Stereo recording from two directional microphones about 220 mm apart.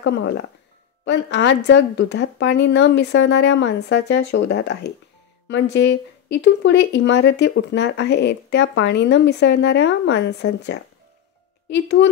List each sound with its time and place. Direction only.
0.0 s a woman's voice: 55° left (ahead or behind)